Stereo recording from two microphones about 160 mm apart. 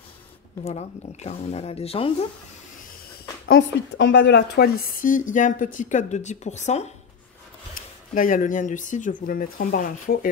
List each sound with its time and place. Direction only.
0.7 s speech: 45° left (ahead or behind)
3.4 s a woman's voice: 90° left; by 6.9 s 45° left (ahead or behind)
8.1 s a woman's voice: 55° left (ahead or behind)